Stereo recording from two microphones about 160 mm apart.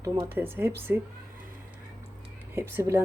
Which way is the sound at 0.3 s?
15° right (ahead or behind).